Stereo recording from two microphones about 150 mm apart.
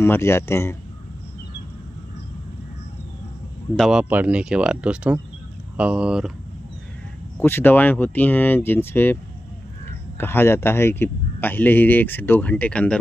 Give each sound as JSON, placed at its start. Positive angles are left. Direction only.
{"t": 0.0, "sound": "speech", "side_deg": 15}
{"t": 3.7, "sound": "speech", "side_deg": 0}
{"t": 4.0, "sound": "speech", "side_deg": -10}
{"t": 7.3, "sound": "speech", "side_deg": 15}